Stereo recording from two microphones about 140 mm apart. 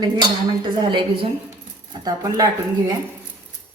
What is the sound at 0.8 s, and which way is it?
A woman's voice, 35° right (ahead or behind).